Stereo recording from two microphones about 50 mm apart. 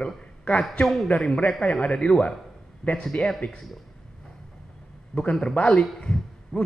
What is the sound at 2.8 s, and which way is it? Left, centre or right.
Speech, left.